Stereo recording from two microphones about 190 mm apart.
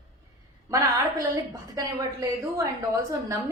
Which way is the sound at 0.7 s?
15° right (ahead or behind).